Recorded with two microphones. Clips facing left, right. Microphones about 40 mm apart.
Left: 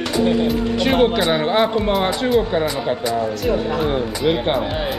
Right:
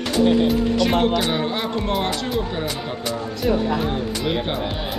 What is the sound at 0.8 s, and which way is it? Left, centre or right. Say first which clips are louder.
Speech: left 6 dB; left.